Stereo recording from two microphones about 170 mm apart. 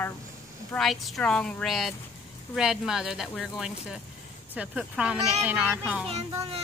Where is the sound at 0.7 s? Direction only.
Centre (ahead or behind).